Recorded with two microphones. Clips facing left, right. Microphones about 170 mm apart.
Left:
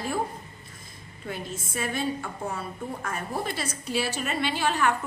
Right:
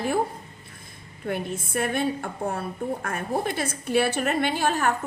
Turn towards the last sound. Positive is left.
turn(degrees=-45)  # may be behind; listen again after turning